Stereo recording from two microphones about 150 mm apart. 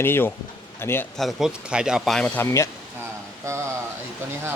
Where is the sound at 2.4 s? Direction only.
20° left (ahead or behind).